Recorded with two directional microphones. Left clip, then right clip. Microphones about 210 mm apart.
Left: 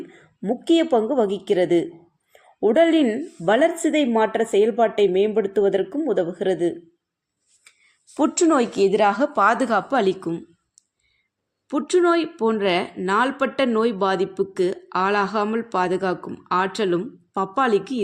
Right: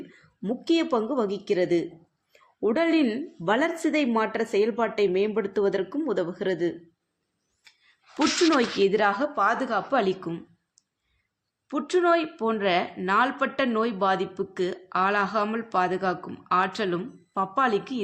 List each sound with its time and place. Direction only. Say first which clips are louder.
0.1 s a woman's voice: left 6 dB; 15° left (ahead or behind)
8.1 s a woman's voice: left 3 dB; 5° left (ahead or behind)
8.9 s speech: left 5 dB; 25° left (ahead or behind); by 9.8 s 40° left (ahead or behind)
9.9 s speech: left 4 dB; 25° left (ahead or behind)
11.7 s speech: left 4 dB; 30° left (ahead or behind)